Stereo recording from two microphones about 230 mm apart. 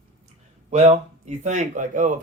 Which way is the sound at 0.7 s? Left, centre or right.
Right.